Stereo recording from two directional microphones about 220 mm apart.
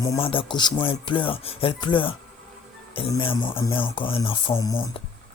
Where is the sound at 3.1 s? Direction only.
25° left (ahead or behind).